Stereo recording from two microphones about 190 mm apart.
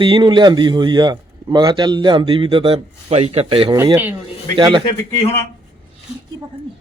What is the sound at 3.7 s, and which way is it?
Speech, 15° right (ahead or behind).